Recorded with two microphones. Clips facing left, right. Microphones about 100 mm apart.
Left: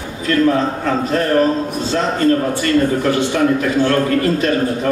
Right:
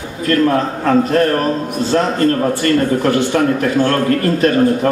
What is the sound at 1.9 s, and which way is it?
A man's voice, 40° right (ahead or behind).